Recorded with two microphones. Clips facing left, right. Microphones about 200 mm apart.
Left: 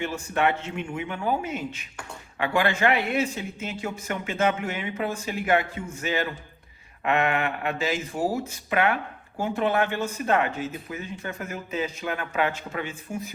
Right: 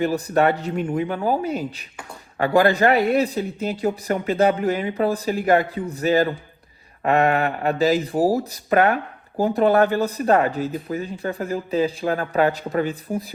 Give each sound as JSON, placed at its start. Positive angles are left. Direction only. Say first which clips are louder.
{"t": 0.0, "sound": "speech", "louder": "right 6 dB", "side_deg": -35}